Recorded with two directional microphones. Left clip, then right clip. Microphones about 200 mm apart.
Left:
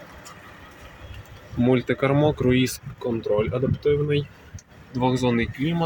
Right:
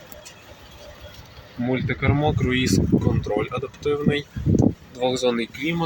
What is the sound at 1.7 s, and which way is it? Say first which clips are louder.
Speech: left 3 dB; 45° left (ahead or behind).